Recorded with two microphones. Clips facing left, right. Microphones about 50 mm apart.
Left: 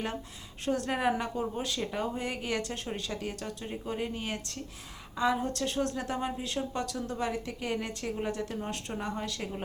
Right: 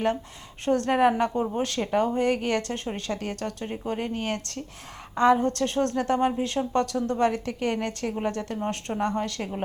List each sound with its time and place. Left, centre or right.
0.6 s a woman's voice: right